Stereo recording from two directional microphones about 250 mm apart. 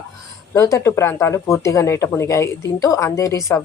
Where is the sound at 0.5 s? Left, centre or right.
Centre.